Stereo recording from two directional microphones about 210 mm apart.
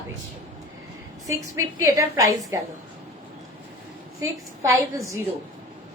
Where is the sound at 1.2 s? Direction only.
15° right (ahead or behind).